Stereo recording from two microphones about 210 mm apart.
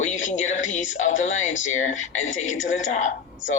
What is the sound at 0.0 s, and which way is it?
Speech, 35° left (ahead or behind).